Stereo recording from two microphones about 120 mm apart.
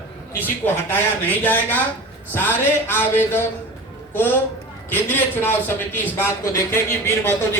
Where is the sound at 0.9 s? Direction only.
15° left (ahead or behind).